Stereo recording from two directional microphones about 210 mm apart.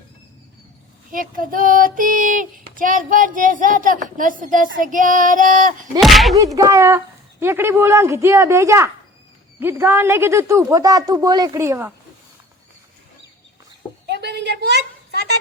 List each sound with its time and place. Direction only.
1.1 s child singing: 40° right (ahead or behind)
6.0 s speech: centre (ahead or behind)
6.3 s speech: 15° right (ahead or behind)
14.1 s a sound: 50° right (ahead or behind)